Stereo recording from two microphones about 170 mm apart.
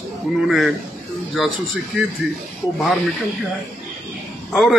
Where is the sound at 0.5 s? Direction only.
Centre (ahead or behind).